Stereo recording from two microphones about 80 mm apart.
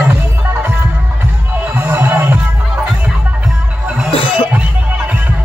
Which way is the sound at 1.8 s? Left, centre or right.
Right.